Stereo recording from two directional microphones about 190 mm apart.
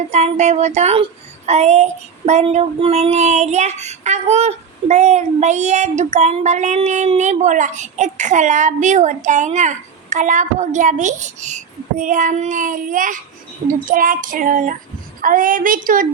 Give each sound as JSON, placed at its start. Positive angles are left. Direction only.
{"t": 0.1, "sound": "child singing", "side_deg": -35}